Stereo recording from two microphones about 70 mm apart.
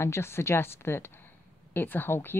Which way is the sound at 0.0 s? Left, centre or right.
Left.